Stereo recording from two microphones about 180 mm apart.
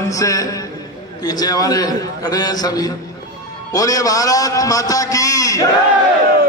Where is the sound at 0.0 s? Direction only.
20° left (ahead or behind).